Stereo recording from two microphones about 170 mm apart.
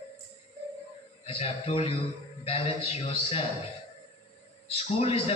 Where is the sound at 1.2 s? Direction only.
35° left (ahead or behind).